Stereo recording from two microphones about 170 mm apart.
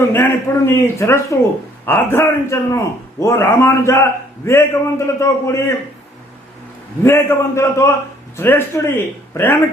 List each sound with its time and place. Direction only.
0.0 s a man's voice: 15° left (ahead or behind)
7.0 s a man's voice: 15° left (ahead or behind)